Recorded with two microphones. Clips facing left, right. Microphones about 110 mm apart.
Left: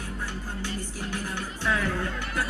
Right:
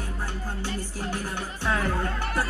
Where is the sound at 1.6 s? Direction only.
40° right (ahead or behind).